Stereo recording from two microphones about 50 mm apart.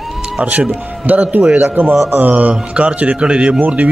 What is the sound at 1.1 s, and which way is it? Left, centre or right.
A man's voice, right.